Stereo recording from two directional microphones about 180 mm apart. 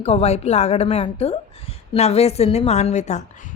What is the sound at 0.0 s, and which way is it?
A woman's voice, 35° left (ahead or behind).